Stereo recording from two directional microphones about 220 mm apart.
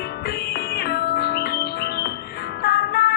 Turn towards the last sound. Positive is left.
turn(degrees=45)  # may be behind; listen again after turning